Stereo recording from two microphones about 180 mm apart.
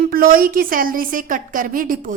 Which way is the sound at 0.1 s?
55° right (ahead or behind).